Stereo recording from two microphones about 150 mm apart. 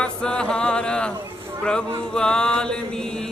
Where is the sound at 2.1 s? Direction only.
5° left (ahead or behind).